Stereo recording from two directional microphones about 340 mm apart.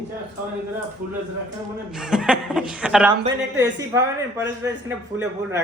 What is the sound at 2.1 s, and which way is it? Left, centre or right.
Speech, centre.